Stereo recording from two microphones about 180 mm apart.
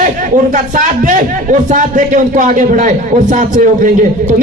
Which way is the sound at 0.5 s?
45° right (ahead or behind).